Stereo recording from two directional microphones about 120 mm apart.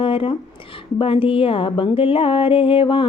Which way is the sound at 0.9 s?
50° left (ahead or behind).